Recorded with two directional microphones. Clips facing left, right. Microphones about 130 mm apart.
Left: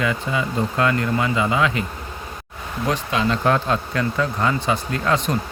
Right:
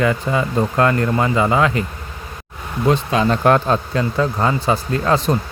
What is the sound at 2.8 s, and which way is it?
Speech, 30° right (ahead or behind).